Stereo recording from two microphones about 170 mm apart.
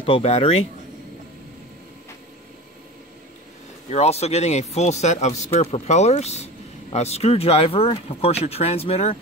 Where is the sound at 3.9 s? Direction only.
40° left (ahead or behind).